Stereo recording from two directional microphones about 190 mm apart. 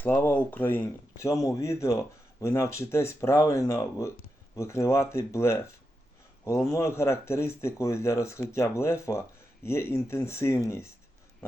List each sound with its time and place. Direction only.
0.0 s speech: 10° left (ahead or behind)